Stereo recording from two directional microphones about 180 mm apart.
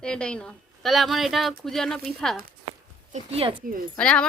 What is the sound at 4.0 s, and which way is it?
Speech, 5° left (ahead or behind).